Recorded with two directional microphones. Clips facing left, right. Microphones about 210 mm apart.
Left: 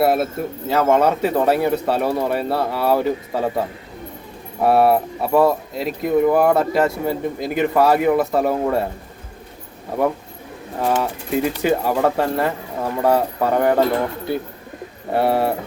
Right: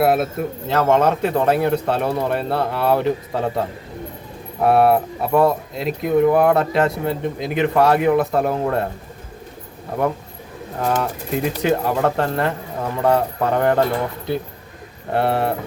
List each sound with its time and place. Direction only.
0.0 s speech: centre (ahead or behind)
4.6 s speech: centre (ahead or behind)
10.8 s speech: 5° left (ahead or behind)
15.1 s speech: 5° left (ahead or behind)